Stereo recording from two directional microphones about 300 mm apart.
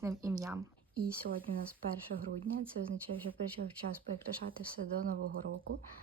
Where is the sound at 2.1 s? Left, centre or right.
Right.